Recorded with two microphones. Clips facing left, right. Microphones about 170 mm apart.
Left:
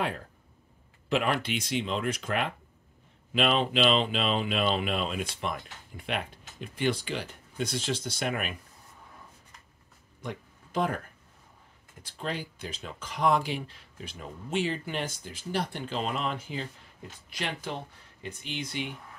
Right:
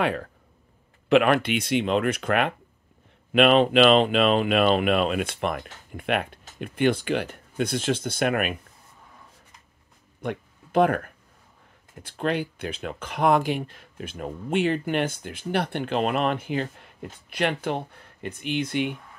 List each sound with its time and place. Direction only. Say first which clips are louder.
0.0 s speech: right 7 dB; 75° right (ahead or behind)
10.2 s speech: right 7 dB; 65° right (ahead or behind)